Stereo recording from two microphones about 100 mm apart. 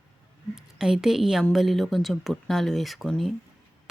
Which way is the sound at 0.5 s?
5° right (ahead or behind).